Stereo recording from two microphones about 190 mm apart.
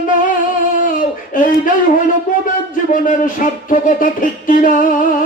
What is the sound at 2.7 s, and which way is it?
Music, 45° left (ahead or behind).